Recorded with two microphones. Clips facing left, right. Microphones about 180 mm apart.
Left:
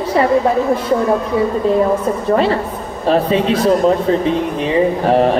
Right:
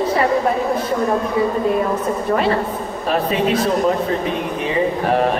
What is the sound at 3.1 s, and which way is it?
Speech, 30° left (ahead or behind).